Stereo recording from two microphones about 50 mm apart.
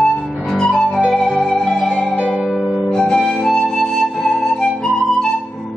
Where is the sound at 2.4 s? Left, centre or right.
Centre.